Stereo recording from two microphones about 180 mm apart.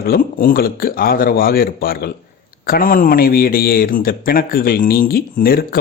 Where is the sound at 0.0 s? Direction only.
50° left (ahead or behind).